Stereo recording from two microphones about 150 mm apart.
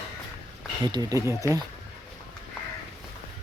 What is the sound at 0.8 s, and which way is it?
Speech, 25° right (ahead or behind).